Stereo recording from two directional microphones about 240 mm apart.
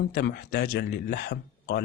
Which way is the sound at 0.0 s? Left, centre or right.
Left.